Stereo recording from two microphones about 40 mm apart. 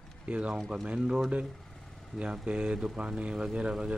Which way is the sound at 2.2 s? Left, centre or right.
Right.